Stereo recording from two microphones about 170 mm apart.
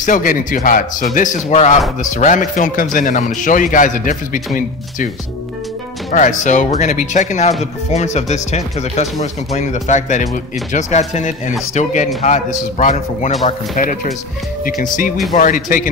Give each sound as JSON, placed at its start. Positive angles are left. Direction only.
{"t": 0.0, "sound": "speech", "side_deg": 50}
{"t": 6.1, "sound": "speech", "side_deg": 45}